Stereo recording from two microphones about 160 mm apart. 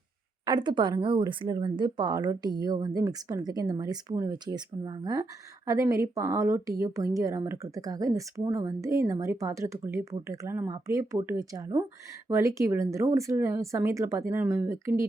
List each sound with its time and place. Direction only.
0.4 s speech: 25° right (ahead or behind)